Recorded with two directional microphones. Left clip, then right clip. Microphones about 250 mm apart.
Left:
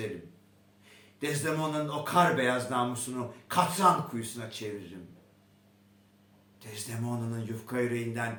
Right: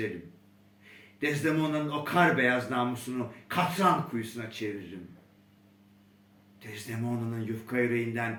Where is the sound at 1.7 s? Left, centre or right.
Centre.